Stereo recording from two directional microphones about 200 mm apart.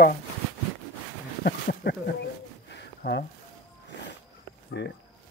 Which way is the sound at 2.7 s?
60° left (ahead or behind).